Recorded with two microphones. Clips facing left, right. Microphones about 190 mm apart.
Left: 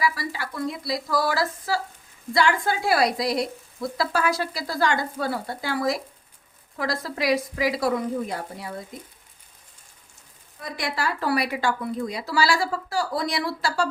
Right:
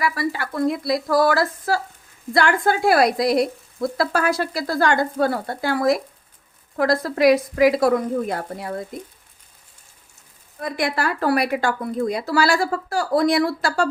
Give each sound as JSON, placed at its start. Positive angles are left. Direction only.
{"t": 0.0, "sound": "speech", "side_deg": -55}
{"t": 10.6, "sound": "speech", "side_deg": -55}